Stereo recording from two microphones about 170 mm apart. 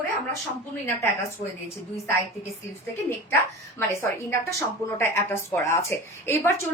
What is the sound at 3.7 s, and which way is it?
A woman's voice, 15° left (ahead or behind).